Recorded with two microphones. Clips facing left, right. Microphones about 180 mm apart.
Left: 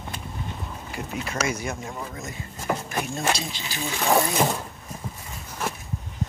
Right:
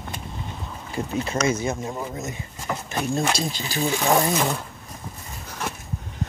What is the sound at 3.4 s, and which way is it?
Speech, 40° right (ahead or behind).